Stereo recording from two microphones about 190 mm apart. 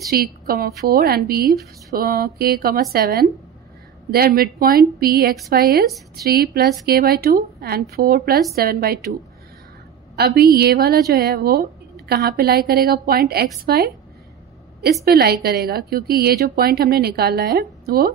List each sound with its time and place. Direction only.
0.1 s a woman's voice: 50° right (ahead or behind)
10.1 s a woman's voice: 55° right (ahead or behind)
15.0 s a woman's voice: 55° right (ahead or behind)